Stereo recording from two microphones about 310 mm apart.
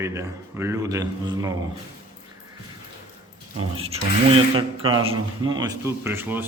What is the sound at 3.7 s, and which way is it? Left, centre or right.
A man's voice, centre.